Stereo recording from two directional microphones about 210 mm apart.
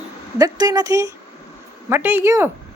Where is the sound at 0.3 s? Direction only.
15° right (ahead or behind).